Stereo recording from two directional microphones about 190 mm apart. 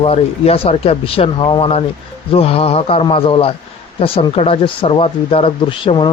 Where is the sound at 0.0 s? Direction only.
30° left (ahead or behind).